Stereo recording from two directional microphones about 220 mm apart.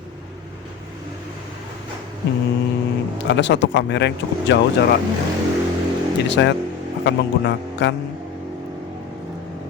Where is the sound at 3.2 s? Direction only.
55° left (ahead or behind).